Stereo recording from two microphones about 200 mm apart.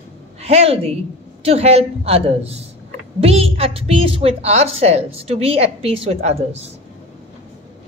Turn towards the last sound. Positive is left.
turn(degrees=-30)  # may be behind; listen again after turning